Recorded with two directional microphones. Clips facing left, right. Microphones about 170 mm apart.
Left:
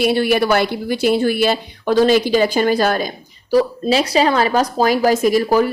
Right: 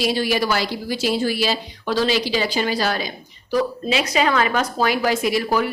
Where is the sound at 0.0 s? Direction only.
60° left (ahead or behind).